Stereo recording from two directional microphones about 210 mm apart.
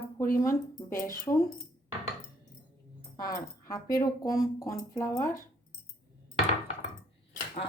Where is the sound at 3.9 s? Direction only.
15° left (ahead or behind).